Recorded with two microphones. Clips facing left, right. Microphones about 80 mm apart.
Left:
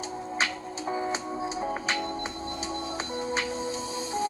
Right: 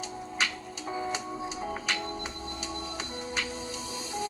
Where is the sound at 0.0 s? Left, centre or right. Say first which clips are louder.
Left 3 dB; left.